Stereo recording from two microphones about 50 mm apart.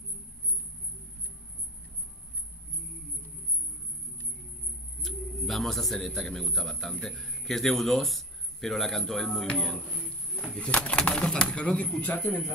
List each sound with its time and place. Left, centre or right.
5.0 s a man's voice: centre; by 12.4 s left